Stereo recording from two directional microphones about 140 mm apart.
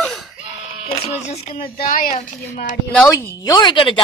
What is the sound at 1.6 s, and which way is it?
A woman's voice, 85° left.